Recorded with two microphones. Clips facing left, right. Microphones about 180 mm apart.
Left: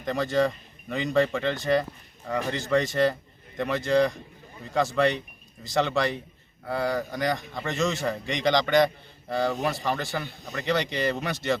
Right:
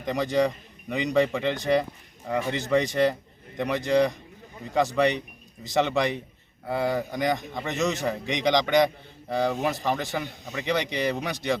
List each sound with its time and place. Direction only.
0.0 s speech: 15° right (ahead or behind)